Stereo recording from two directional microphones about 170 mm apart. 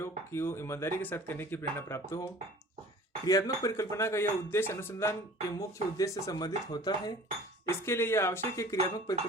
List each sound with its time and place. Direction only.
0.3 s speech: 15° left (ahead or behind)
3.2 s speech: 20° left (ahead or behind)